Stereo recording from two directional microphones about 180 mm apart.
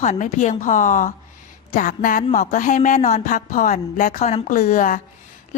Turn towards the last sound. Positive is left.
turn(degrees=45)  # may be behind; listen again after turning